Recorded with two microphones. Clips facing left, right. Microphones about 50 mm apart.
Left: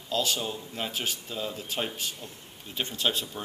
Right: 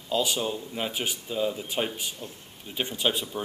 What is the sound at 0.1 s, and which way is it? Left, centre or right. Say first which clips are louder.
Speech: right 3 dB; centre.